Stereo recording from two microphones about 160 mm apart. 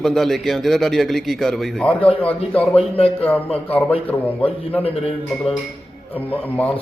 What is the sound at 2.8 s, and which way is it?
Speech, 35° left (ahead or behind).